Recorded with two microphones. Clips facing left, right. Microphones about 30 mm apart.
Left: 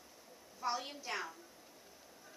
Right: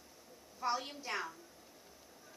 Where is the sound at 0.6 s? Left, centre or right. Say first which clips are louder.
Right 2 dB; centre.